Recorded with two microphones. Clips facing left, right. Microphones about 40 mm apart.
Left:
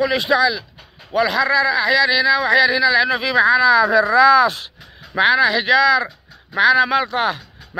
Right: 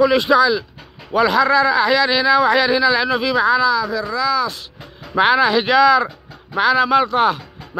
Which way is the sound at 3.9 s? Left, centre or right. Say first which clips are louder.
Left 8 dB; left.